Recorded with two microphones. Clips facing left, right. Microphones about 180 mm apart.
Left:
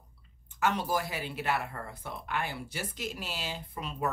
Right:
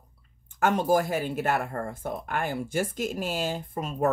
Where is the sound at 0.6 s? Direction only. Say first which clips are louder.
Right 7 dB; 50° right (ahead or behind).